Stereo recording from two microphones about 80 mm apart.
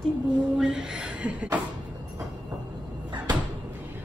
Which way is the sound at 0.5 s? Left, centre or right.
Centre.